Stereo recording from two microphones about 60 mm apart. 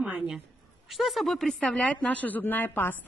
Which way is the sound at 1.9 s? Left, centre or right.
Left.